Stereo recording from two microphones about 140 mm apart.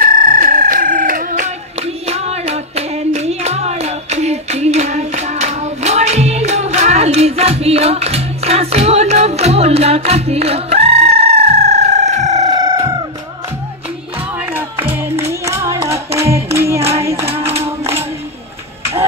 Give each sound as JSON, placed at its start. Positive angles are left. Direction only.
{"t": 0.0, "sound": "a sound", "side_deg": -90}
{"t": 12.4, "sound": "music", "side_deg": -30}
{"t": 14.4, "sound": "music", "side_deg": -15}